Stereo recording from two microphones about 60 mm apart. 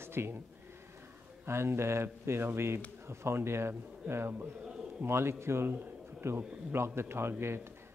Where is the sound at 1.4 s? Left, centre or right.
Right.